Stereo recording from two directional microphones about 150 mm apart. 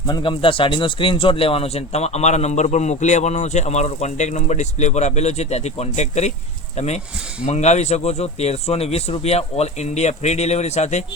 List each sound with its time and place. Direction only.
0.1 s a man's voice: 35° left (ahead or behind)